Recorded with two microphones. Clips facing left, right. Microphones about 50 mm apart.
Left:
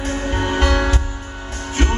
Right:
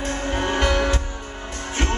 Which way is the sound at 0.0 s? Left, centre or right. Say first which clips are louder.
Left 2 dB; centre.